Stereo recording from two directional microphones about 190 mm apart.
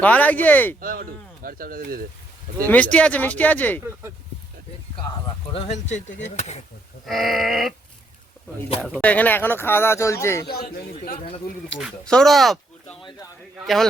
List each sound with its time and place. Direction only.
0.0 s speech: 10° left (ahead or behind)
0.8 s speech: 50° right (ahead or behind)
2.6 s speech: 5° left (ahead or behind)
5.5 s speech: 40° left (ahead or behind)
7.0 s speech: centre (ahead or behind)
8.8 s speech: 5° left (ahead or behind)
10.5 s speech: 55° left (ahead or behind)
11.8 s speech: centre (ahead or behind)